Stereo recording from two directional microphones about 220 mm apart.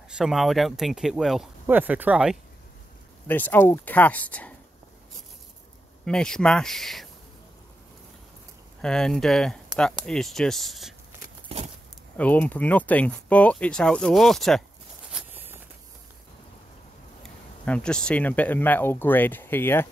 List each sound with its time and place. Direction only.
0.1 s speech: centre (ahead or behind)
3.3 s speech: 10° left (ahead or behind)
6.0 s speech: 5° left (ahead or behind)
8.8 s speech: 5° left (ahead or behind)
11.4 s a sound: 30° right (ahead or behind)
12.2 s speech: 5° left (ahead or behind)
15.1 s a sound: 10° right (ahead or behind)
17.2 s speech: 5° left (ahead or behind)